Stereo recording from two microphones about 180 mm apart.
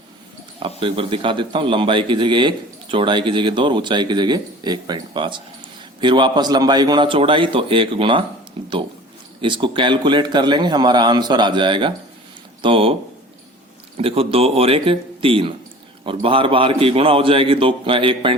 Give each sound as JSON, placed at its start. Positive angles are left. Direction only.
{"t": 0.8, "sound": "a man's voice", "side_deg": -30}